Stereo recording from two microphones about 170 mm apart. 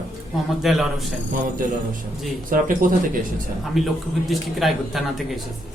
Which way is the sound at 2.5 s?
55° right (ahead or behind).